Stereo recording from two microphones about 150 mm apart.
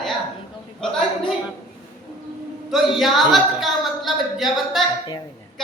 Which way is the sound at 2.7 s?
Centre (ahead or behind).